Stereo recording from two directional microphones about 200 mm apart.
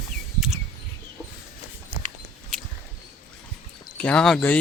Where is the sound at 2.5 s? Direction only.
Centre (ahead or behind).